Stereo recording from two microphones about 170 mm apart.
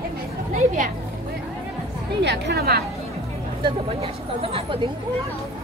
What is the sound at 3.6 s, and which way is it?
Speech, 35° right (ahead or behind).